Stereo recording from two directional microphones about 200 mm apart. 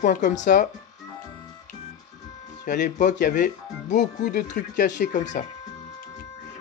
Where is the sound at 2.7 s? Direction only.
40° left (ahead or behind).